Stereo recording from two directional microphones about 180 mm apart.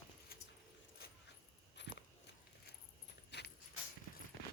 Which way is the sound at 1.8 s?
75° left (ahead or behind).